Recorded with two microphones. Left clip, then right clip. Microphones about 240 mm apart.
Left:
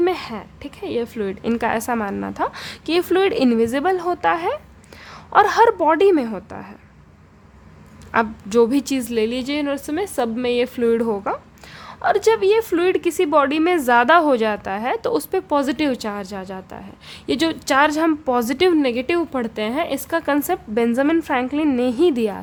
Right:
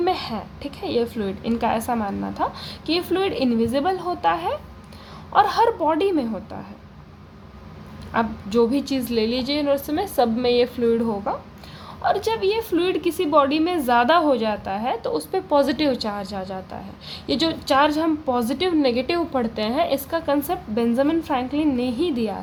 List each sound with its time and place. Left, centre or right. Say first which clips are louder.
0.0 s a woman's voice: left 2 dB; left
8.1 s a woman's voice: left 4 dB; left